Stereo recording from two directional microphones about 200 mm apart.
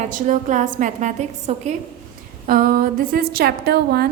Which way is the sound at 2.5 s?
45° right (ahead or behind).